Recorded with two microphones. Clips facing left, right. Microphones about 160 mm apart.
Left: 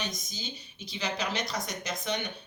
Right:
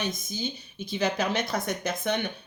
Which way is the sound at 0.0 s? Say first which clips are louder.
Right 6 dB; 55° right (ahead or behind).